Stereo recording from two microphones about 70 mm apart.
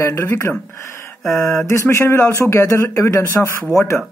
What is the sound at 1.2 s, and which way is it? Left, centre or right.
Mantra, centre.